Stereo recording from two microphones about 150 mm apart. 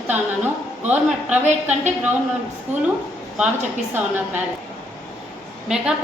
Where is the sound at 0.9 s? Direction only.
10° right (ahead or behind).